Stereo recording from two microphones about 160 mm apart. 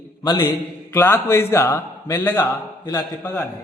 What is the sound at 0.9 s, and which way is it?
A man's voice, 15° left (ahead or behind).